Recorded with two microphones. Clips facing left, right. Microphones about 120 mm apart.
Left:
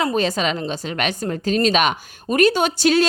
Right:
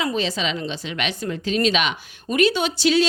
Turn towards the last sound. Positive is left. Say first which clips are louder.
# left 2 dB
turn(degrees=45)  # may be behind; listen again after turning